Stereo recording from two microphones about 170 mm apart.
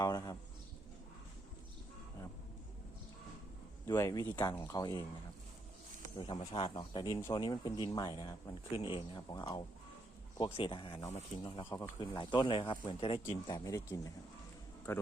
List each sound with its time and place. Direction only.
0.0 s a man's voice: 20° left (ahead or behind)
3.8 s speech: 20° left (ahead or behind)
6.1 s speech: 25° left (ahead or behind)
13.7 s speech: 20° left (ahead or behind)